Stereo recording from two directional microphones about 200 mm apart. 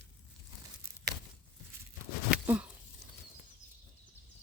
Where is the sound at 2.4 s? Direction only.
10° right (ahead or behind).